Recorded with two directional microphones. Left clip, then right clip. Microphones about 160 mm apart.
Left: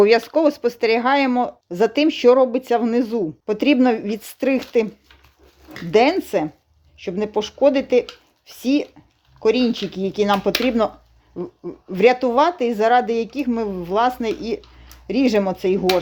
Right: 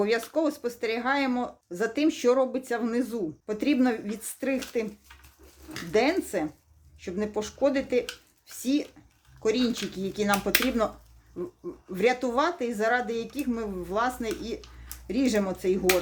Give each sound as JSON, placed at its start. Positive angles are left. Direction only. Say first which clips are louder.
{"t": 0.0, "sound": "speech", "louder": "left 11 dB", "side_deg": 45}
{"t": 5.9, "sound": "speech", "louder": "left 9 dB", "side_deg": 45}
{"t": 9.4, "sound": "speech", "louder": "left 8 dB", "side_deg": 40}
{"t": 11.9, "sound": "speech", "louder": "left 10 dB", "side_deg": 40}